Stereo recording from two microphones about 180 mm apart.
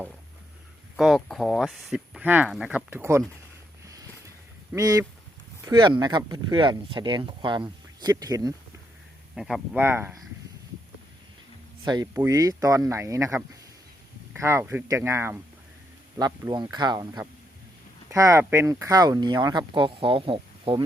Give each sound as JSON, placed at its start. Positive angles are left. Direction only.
{"t": 0.9, "sound": "speech", "side_deg": 0}
{"t": 4.7, "sound": "speech", "side_deg": -20}
{"t": 9.3, "sound": "speech", "side_deg": -5}
{"t": 11.9, "sound": "speech", "side_deg": -20}